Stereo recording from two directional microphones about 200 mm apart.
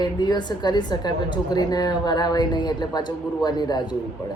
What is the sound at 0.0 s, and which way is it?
A woman's voice, 20° left (ahead or behind).